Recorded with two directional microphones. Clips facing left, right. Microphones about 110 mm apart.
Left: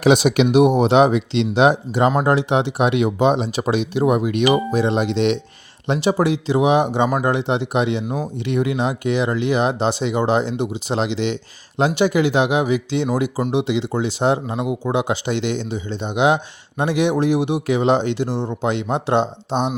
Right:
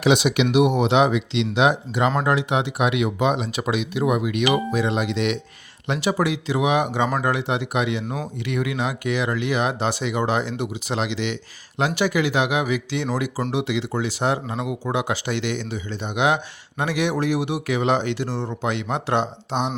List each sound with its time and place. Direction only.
0.0 s speech: 40° left (ahead or behind); by 19.5 s 25° left (ahead or behind)